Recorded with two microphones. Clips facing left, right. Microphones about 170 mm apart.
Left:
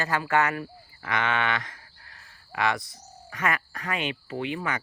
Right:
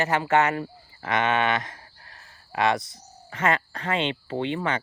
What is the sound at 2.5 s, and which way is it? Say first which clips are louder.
Cricket: right 4 dB; 20° right (ahead or behind).